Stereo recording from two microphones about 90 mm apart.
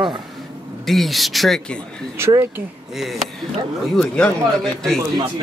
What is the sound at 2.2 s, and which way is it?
Speech, 30° right (ahead or behind).